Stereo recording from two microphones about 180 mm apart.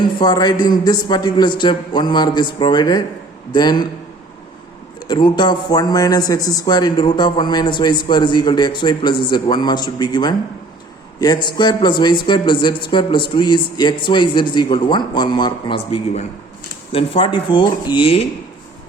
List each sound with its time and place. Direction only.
0.2 s speech: 20° left (ahead or behind)
5.0 s speech: 25° left (ahead or behind)